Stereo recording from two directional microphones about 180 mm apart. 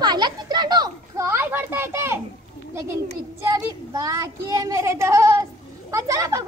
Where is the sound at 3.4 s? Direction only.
20° right (ahead or behind).